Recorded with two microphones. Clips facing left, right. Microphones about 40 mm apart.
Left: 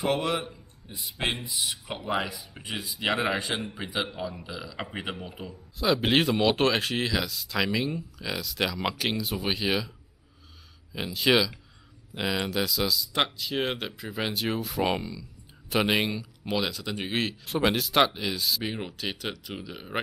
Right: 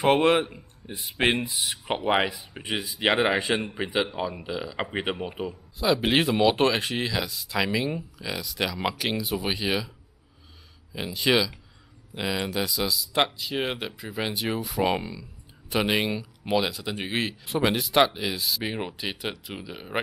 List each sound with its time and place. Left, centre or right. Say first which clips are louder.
0.0 s speech: right 7 dB; right
5.5 s speech: even; centre
10.9 s speech: even; centre
15.0 s speech: right 2 dB; centre
15.7 s speech: even; centre
16.1 s speech: right 4 dB; centre